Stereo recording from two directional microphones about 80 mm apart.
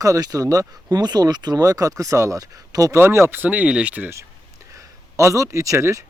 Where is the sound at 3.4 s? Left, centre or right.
Centre.